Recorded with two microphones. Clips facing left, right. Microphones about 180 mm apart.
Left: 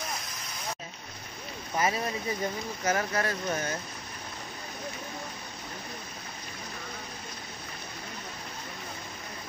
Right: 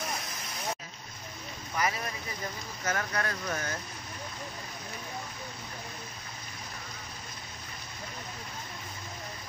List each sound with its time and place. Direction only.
1.8 s speech: 25° left (ahead or behind)
2.8 s speech: 10° left (ahead or behind)
3.2 s speech: 25° left (ahead or behind)